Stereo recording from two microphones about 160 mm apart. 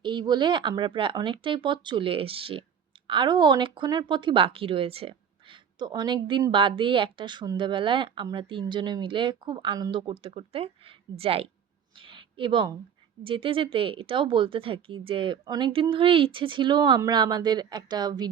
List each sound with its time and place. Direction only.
0.0 s speech: 30° right (ahead or behind)
11.9 s a sound: 30° right (ahead or behind)
13.2 s speech: 35° right (ahead or behind)